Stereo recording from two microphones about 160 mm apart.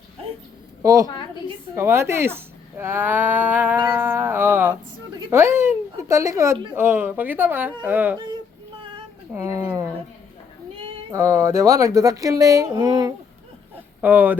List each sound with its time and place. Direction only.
0.8 s a woman's voice: 20° right (ahead or behind)
9.3 s speech: 15° right (ahead or behind)
11.1 s speech: 20° right (ahead or behind)
14.0 s speech: 10° right (ahead or behind)